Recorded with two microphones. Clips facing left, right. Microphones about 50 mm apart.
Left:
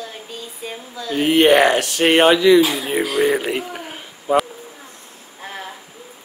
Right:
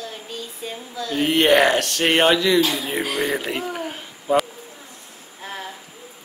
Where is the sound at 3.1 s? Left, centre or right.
Centre.